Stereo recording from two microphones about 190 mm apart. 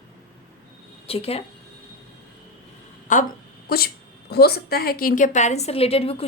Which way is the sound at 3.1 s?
40° left (ahead or behind).